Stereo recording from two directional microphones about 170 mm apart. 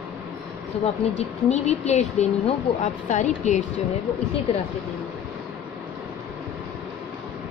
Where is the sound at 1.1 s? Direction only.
40° left (ahead or behind).